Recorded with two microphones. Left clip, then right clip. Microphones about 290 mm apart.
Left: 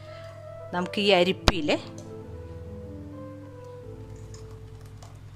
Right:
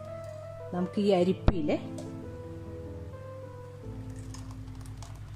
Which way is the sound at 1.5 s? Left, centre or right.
Left.